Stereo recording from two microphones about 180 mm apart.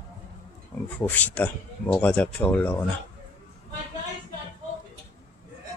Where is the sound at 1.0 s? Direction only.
10° left (ahead or behind).